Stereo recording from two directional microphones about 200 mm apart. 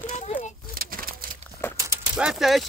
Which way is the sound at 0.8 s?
45° right (ahead or behind).